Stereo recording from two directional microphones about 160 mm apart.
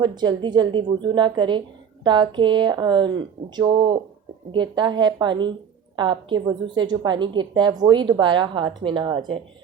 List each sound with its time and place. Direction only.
0.0 s a woman's voice: 25° right (ahead or behind)